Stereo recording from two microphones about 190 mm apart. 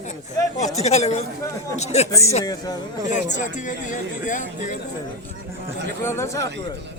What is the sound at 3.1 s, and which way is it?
Speech, 40° left (ahead or behind).